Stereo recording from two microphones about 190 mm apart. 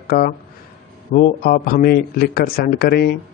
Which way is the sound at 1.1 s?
50° left (ahead or behind).